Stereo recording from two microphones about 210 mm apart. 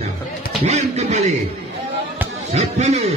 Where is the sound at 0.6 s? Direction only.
35° right (ahead or behind).